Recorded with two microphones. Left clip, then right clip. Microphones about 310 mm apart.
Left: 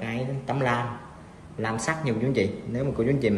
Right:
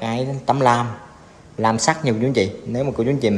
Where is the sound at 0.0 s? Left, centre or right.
Centre.